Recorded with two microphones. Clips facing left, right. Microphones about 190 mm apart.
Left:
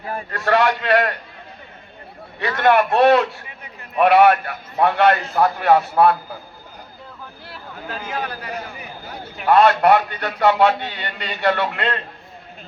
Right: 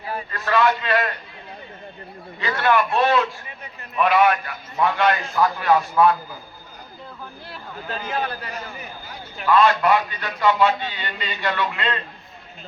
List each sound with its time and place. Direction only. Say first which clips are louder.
0.1 s a man's voice: left 1 dB; 50° left (ahead or behind)
0.3 s a man's voice: left 2 dB; 70° left (ahead or behind)
2.4 s a man's voice: left 4 dB; 65° left (ahead or behind)
7.5 s a man's voice: even; 10° left (ahead or behind)
9.0 s a man's voice: left 3 dB; 65° left (ahead or behind)